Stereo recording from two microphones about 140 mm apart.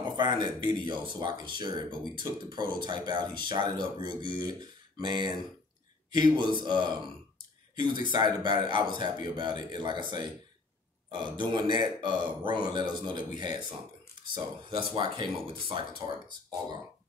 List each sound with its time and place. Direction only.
0.0 s speech: 30° right (ahead or behind)
11.3 s speech: 35° right (ahead or behind)